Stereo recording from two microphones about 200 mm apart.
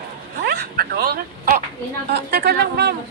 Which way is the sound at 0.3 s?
55° right (ahead or behind).